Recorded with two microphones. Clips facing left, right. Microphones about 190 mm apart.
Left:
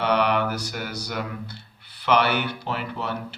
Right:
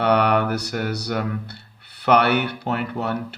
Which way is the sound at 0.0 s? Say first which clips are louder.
Right 4 dB; 60° right (ahead or behind).